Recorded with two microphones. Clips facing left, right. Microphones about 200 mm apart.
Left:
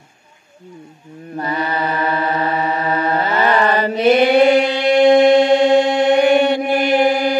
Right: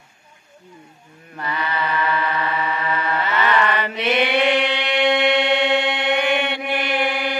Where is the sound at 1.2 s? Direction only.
40° left (ahead or behind).